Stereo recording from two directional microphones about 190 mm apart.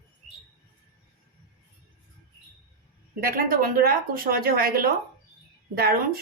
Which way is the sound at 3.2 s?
50° right (ahead or behind).